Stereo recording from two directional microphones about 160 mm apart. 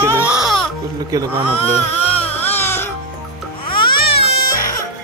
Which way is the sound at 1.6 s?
40° left (ahead or behind).